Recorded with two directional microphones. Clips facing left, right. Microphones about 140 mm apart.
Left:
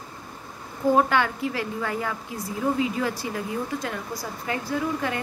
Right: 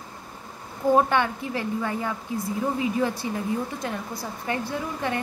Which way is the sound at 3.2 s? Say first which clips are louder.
Right 2 dB; 35° right (ahead or behind).